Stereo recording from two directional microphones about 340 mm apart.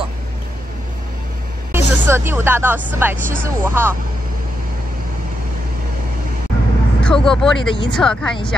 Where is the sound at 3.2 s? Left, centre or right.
Right.